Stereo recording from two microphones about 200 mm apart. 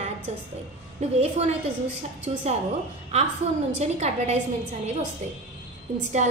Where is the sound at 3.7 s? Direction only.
35° right (ahead or behind).